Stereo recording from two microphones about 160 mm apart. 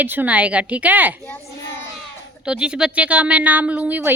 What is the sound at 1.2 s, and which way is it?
Children playing, 15° left (ahead or behind).